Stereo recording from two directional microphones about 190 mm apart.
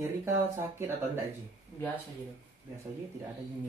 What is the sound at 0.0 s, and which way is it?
Speech, 15° right (ahead or behind).